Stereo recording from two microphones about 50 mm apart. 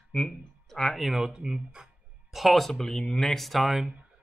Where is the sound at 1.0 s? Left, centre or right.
Centre.